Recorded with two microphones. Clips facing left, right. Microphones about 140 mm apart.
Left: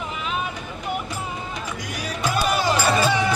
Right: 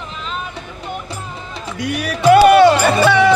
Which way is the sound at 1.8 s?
70° right (ahead or behind).